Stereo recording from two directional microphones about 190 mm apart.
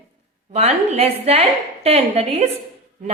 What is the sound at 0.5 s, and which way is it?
A woman's voice, 35° right (ahead or behind).